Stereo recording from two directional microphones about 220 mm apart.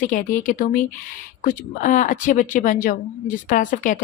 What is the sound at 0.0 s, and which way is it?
Speech, 35° left (ahead or behind).